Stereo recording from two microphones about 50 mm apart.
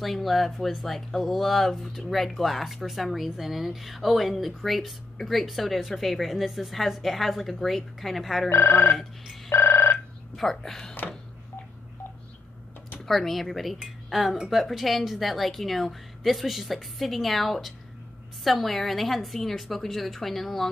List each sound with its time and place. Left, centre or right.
0.0 s speech: centre
8.5 s speech: left
9.5 s a sound: left
10.3 s a woman's voice: centre
13.0 s speech: centre